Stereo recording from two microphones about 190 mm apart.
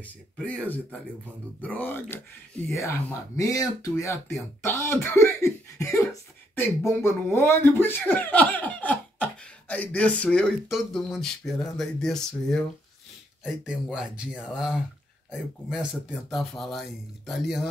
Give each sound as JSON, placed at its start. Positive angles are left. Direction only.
{"t": 0.0, "sound": "speech", "side_deg": 10}